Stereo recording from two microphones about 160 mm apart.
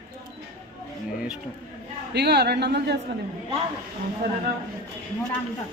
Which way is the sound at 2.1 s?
90° right.